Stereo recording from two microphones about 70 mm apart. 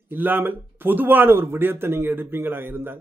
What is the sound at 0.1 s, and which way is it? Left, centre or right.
A man's voice, right.